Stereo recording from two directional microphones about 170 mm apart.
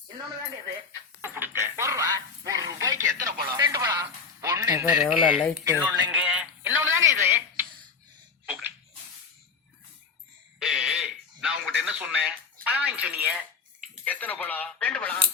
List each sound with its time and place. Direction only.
1.2 s telephone: 15° right (ahead or behind)
3.1 s telephone: 60° right (ahead or behind)
3.4 s radio: 25° right (ahead or behind)
4.9 s speech: 5° right (ahead or behind)
5.4 s speech: 5° left (ahead or behind)
5.6 s speech: 10° right (ahead or behind)
6.1 s a sound: 10° right (ahead or behind)
10.6 s radio: centre (ahead or behind)
12.6 s a sound: 10° right (ahead or behind)
14.0 s a sound: 10° left (ahead or behind)